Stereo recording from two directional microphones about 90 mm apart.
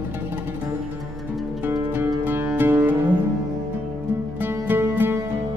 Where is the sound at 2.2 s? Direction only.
20° right (ahead or behind).